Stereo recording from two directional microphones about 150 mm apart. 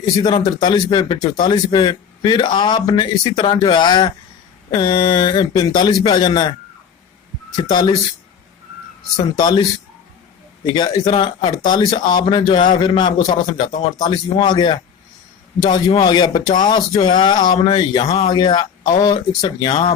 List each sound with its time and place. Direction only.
0.0 s a man's voice: 30° left (ahead or behind)
9.4 s a man's voice: 30° left (ahead or behind)
15.9 s speech: 30° left (ahead or behind)